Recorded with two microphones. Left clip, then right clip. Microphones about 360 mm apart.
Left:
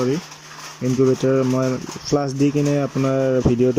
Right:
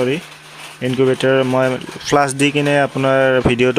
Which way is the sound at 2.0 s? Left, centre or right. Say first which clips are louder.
Right 6 dB; right.